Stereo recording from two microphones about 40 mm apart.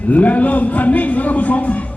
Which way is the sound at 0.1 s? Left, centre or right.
Left.